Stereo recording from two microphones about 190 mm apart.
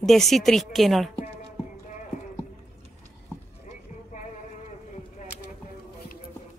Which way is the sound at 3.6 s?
40° left (ahead or behind).